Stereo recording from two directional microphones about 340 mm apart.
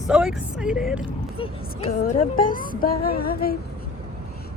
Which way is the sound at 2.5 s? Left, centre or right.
Left.